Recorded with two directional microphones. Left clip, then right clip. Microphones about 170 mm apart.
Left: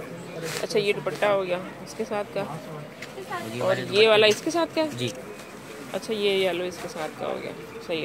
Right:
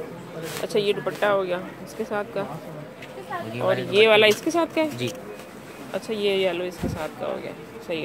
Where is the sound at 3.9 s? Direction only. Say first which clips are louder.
Right 2 dB; 20° right (ahead or behind).